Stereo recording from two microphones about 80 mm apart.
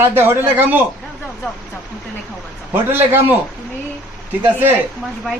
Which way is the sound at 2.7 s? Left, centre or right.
Right.